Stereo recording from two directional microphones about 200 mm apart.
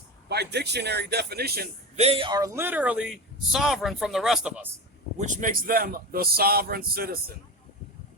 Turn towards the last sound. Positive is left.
turn(degrees=-50)  # may be behind; listen again after turning